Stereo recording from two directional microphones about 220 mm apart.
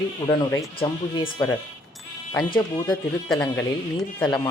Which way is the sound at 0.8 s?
20° left (ahead or behind).